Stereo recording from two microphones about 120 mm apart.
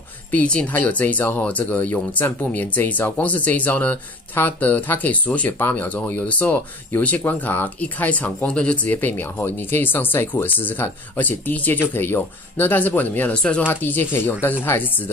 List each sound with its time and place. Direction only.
0.3 s speech: 10° left (ahead or behind)